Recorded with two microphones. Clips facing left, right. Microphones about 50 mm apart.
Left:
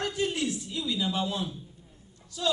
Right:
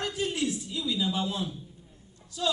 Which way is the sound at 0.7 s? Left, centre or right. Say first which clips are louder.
Even; left.